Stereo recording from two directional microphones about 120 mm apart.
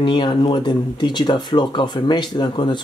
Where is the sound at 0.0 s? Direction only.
40° left (ahead or behind).